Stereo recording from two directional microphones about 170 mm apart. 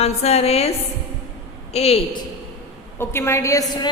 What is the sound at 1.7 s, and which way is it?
Speech, 35° left (ahead or behind).